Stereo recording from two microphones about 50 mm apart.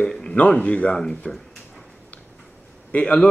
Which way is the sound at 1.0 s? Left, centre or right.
Centre.